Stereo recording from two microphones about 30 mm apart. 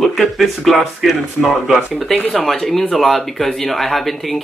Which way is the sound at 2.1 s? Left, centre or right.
Centre.